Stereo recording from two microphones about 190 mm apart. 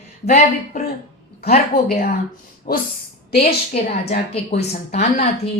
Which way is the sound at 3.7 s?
35° left (ahead or behind).